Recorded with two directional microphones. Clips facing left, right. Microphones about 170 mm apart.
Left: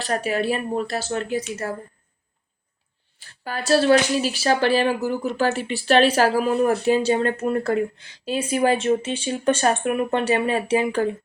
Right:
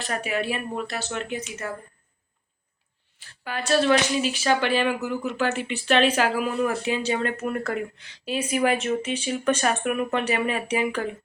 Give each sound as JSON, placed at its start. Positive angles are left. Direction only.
{"t": 0.0, "sound": "speech", "side_deg": 35}
{"t": 3.2, "sound": "speech", "side_deg": 35}